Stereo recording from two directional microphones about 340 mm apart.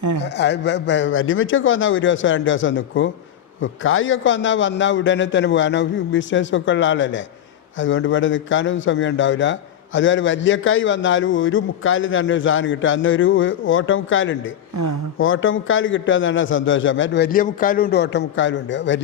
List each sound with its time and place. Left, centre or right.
0.2 s a man's voice: left